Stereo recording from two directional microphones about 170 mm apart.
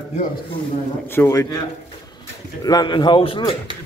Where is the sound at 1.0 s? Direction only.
15° left (ahead or behind).